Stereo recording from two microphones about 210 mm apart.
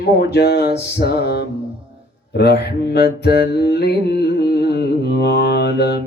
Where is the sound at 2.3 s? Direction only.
50° left (ahead or behind).